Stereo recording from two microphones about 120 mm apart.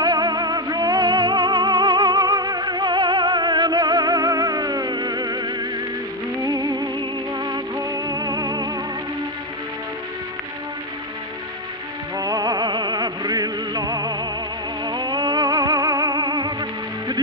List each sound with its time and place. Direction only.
0.0 s music: 35° right (ahead or behind)
12.2 s music: 30° right (ahead or behind)